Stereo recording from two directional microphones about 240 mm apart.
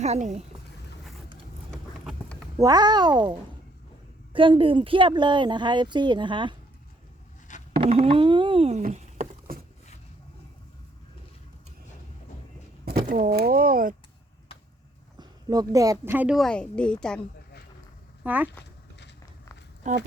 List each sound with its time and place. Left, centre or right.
0.0 s speech: right
2.6 s speech: centre
7.8 s a sound: right
13.1 s a sound: right
15.2 s speech: centre
18.2 s speech: centre
19.9 s speech: right